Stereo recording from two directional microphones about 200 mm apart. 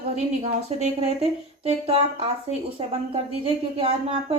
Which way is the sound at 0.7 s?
30° right (ahead or behind).